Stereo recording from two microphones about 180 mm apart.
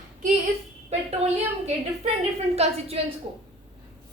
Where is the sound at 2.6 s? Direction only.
35° right (ahead or behind).